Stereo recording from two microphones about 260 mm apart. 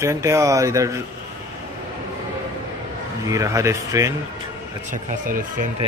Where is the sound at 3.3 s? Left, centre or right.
Centre.